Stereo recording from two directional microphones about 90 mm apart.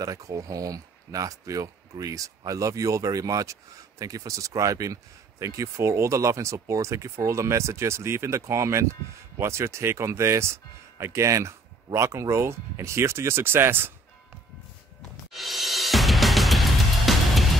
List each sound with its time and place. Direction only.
0.0 s speech: 40° right (ahead or behind); by 13.9 s 25° right (ahead or behind)
15.0 s music: centre (ahead or behind)